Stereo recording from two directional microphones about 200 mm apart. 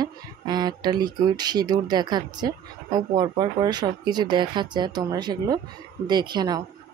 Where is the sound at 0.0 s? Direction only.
20° right (ahead or behind).